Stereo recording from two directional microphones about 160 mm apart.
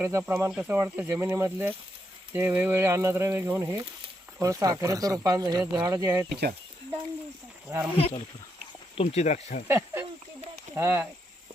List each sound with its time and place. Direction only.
0.0 s speech: 15° right (ahead or behind)
7.9 s speech: 35° left (ahead or behind)
9.6 s speech: 15° right (ahead or behind)